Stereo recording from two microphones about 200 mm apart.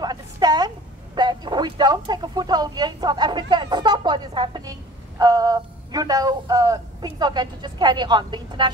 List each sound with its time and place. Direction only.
0.0 s a woman's voice: 20° right (ahead or behind)